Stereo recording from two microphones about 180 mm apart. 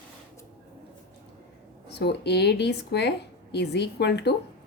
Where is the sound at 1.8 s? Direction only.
70° left (ahead or behind).